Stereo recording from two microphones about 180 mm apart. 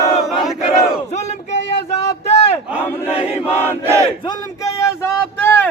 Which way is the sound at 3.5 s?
15° right (ahead or behind).